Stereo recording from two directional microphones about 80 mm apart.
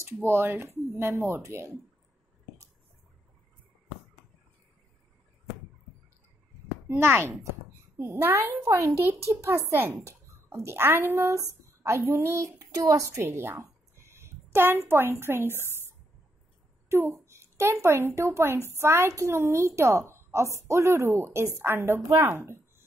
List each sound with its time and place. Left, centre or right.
0.0 s a woman's voice: right
6.9 s a woman's voice: right
12.7 s a woman's voice: right
13.3 s a woman's voice: right
16.9 s a woman's voice: right